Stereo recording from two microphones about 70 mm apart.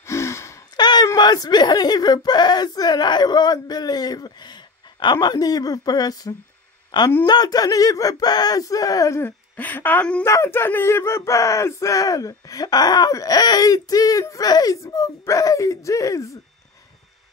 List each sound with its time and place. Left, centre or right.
0.0 s gasp: left
0.7 s a sound: left
1.1 s speech: left
6.9 s speech: left
7.2 s speech: left
9.6 s speech: left
10.2 s speech: left
13.1 s speech: left
14.8 s speech: left